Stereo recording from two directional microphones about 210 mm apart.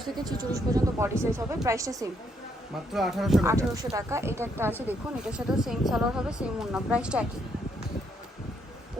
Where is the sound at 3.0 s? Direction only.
Centre (ahead or behind).